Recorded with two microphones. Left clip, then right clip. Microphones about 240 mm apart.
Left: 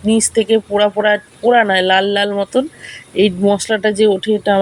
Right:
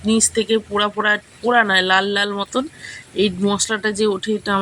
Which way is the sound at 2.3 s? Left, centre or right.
Left.